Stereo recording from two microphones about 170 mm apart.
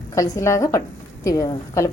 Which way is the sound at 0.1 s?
20° left (ahead or behind).